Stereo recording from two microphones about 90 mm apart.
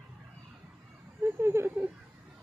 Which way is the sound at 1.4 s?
30° right (ahead or behind).